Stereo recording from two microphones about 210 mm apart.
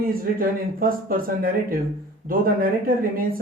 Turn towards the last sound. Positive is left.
turn(degrees=-40)  # may be behind; listen again after turning